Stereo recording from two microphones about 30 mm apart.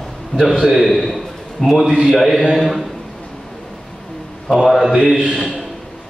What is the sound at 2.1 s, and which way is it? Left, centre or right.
Speech, centre.